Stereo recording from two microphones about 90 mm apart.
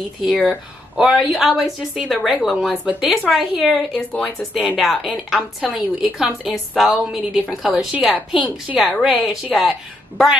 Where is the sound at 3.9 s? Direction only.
15° left (ahead or behind).